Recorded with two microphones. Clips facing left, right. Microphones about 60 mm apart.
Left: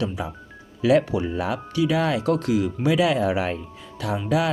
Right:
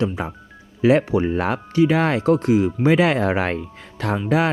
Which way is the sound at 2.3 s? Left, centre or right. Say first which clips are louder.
Right 5 dB; right.